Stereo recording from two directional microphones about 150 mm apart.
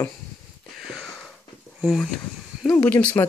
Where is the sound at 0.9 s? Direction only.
5° right (ahead or behind).